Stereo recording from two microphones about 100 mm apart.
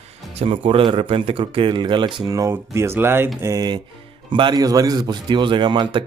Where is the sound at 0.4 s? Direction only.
65° right (ahead or behind).